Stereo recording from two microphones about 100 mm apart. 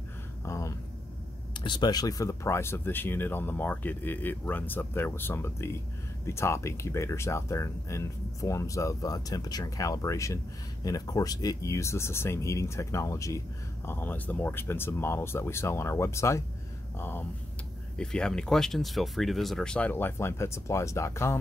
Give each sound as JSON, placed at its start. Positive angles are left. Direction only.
{"t": 0.5, "sound": "a sound", "side_deg": 30}
{"t": 1.6, "sound": "speech", "side_deg": 45}
{"t": 13.8, "sound": "speech", "side_deg": 20}
{"t": 17.9, "sound": "speech", "side_deg": 5}
{"t": 19.9, "sound": "speech", "side_deg": 20}